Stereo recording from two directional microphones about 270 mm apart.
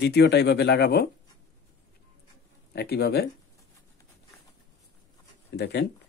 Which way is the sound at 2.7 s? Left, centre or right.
Left.